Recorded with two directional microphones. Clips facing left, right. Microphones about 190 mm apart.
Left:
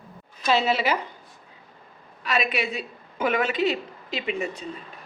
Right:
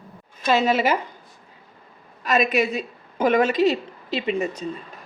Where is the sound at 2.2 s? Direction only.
45° right (ahead or behind).